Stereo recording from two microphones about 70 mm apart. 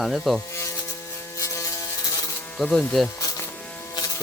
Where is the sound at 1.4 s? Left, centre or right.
Left.